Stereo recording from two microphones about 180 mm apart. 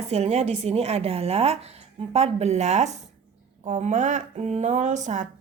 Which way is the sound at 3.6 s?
40° right (ahead or behind).